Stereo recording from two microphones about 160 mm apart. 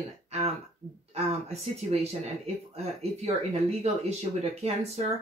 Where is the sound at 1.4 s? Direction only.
40° right (ahead or behind).